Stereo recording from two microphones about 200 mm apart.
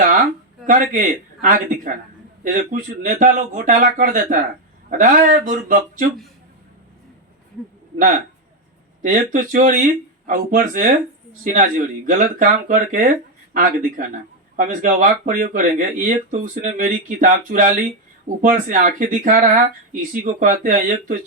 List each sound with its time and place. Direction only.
0.0 s speech: 45° right (ahead or behind)
9.0 s speech: 45° right (ahead or behind)
12.0 s speech: 45° right (ahead or behind)